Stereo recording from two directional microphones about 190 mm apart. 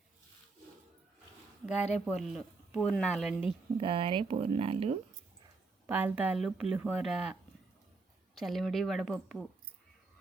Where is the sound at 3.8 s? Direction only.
25° right (ahead or behind).